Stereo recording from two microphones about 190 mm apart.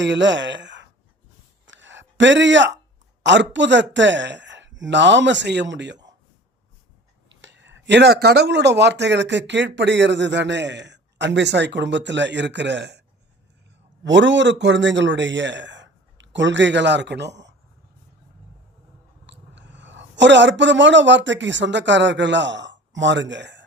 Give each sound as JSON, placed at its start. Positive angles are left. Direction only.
{"t": 0.0, "sound": "speech", "side_deg": -70}
{"t": 1.6, "sound": "a sound", "side_deg": -75}
{"t": 3.2, "sound": "speech", "side_deg": -70}
{"t": 7.3, "sound": "speech", "side_deg": -75}
{"t": 14.0, "sound": "a man's voice", "side_deg": -70}
{"t": 19.2, "sound": "speech", "side_deg": -70}